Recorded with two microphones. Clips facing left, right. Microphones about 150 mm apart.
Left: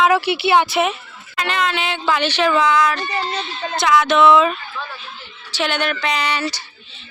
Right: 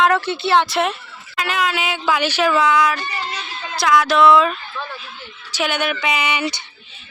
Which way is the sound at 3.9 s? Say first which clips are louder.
Even; centre (ahead or behind).